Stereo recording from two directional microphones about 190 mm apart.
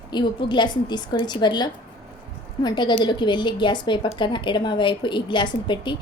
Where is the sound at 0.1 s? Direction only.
25° left (ahead or behind).